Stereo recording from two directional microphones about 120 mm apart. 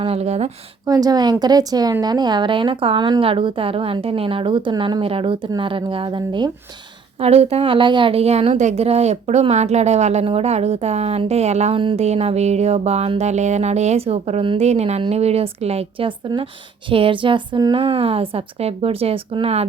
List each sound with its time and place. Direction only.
0.0 s a woman's voice: 60° right (ahead or behind)
0.9 s speech: 30° right (ahead or behind)
7.2 s a woman's voice: 60° right (ahead or behind)